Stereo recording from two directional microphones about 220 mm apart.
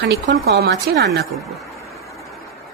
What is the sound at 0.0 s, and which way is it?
Speech, 55° right (ahead or behind).